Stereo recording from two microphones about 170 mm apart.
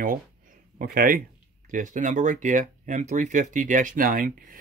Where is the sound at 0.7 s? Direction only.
55° right (ahead or behind).